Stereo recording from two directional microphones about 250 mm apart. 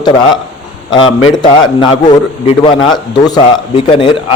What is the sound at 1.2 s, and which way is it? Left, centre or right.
A man's voice, centre.